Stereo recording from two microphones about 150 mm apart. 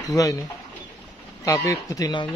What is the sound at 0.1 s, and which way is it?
Mantra, 20° left (ahead or behind).